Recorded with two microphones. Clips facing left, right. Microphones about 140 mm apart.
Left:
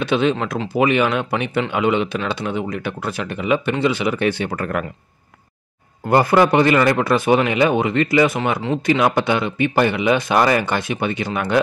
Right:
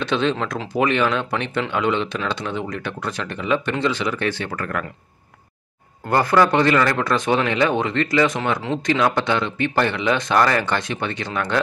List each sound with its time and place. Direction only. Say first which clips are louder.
0.0 s speech: left 3 dB; 10° left (ahead or behind)
6.0 s speech: left 3 dB; 15° left (ahead or behind)